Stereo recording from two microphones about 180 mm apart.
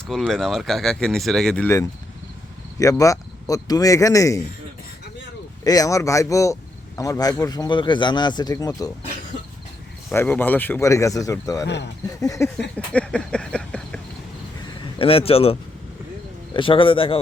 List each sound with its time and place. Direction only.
0.1 s speech: centre (ahead or behind)
2.7 s speech: 20° left (ahead or behind)
5.6 s speech: 20° left (ahead or behind)
10.1 s speech: 10° left (ahead or behind)
12.7 s a sound: 5° left (ahead or behind)
14.9 s speech: 30° left (ahead or behind)
16.6 s speech: 30° left (ahead or behind)